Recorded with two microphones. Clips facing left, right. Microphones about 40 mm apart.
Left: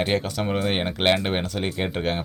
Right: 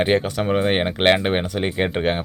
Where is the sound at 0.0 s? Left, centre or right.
Right.